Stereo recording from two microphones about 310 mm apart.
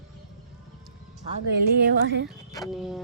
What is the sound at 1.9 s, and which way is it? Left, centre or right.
Speech, right.